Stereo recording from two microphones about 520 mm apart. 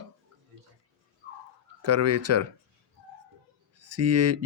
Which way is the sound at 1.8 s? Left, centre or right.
Right.